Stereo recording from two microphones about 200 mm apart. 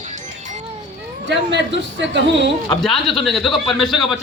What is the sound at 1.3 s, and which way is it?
Speech, 65° right (ahead or behind).